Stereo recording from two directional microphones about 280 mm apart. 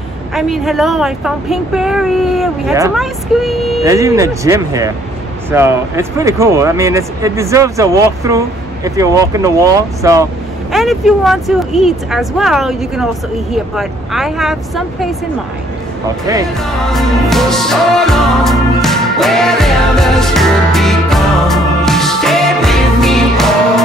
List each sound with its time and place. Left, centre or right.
0.3 s speech: centre
3.8 s speech: centre
10.7 s speech: centre
16.8 s music: centre